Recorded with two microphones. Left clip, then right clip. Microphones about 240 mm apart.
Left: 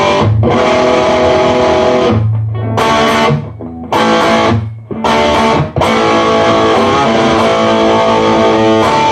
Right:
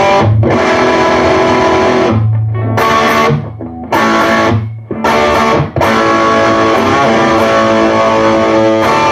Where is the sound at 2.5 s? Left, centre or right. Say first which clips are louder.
Right 1 dB; right.